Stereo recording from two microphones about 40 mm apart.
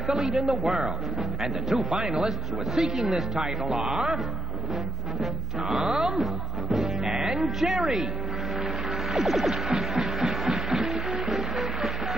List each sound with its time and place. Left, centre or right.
0.0 s speech: centre
5.9 s speech: centre
6.1 s music: centre
7.4 s speech: centre
8.5 s music: centre